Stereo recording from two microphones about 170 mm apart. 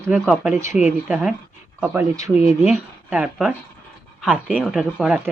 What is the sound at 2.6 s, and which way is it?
Speech, 5° right (ahead or behind).